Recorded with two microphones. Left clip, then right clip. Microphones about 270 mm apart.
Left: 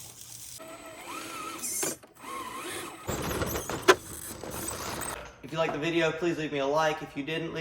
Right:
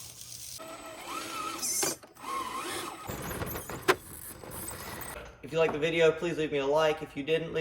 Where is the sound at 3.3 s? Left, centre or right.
Left.